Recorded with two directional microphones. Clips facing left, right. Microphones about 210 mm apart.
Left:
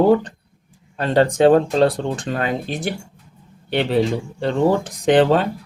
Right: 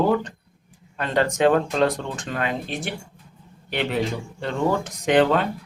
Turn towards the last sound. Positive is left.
turn(degrees=35)  # may be behind; listen again after turning